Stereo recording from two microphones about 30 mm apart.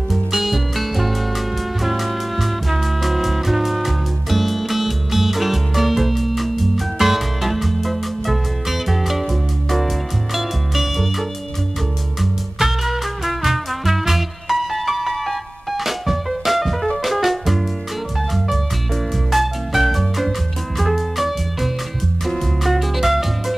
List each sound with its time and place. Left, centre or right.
0.1 s music: centre
19.3 s music: centre